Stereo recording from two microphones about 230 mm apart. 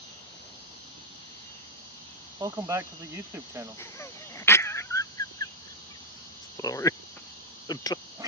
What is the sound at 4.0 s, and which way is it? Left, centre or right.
Dog, centre.